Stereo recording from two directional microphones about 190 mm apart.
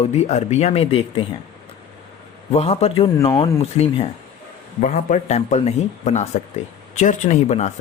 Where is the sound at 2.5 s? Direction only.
30° left (ahead or behind).